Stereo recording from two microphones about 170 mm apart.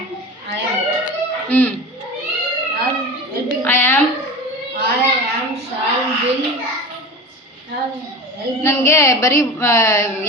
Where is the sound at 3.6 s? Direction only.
15° left (ahead or behind).